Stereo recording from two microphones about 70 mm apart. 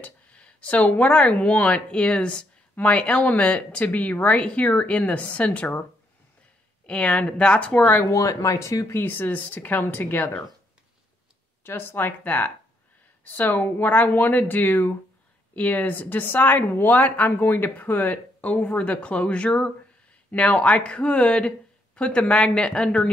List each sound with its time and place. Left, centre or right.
0.0 s speech: centre
6.9 s speech: centre
8.1 s speech: left
8.9 s speech: left
11.6 s speech: left; by 23.0 s centre